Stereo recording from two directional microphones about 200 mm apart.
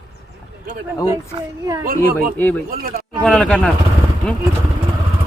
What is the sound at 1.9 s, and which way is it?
Speech, 45° right (ahead or behind).